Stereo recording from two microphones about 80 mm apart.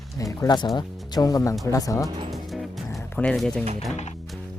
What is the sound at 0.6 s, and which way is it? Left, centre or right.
Speech, left.